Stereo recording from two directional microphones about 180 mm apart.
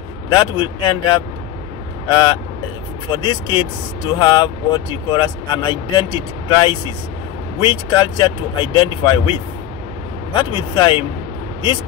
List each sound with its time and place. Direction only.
0.3 s speech: 25° left (ahead or behind)